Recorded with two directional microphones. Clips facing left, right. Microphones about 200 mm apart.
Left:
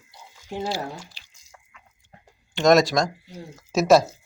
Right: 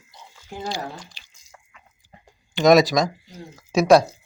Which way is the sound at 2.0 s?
Centre (ahead or behind).